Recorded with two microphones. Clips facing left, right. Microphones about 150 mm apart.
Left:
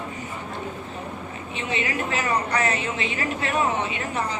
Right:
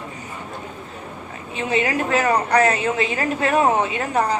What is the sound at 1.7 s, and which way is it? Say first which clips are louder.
A woman's voice: right 7 dB; 40° right (ahead or behind).